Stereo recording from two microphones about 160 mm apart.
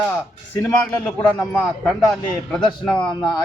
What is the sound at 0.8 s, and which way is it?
A man's voice, 10° left (ahead or behind).